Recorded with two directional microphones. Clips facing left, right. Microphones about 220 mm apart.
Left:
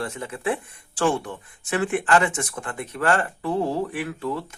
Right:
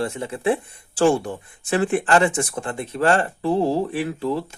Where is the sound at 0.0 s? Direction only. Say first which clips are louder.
Right 5 dB; 25° right (ahead or behind).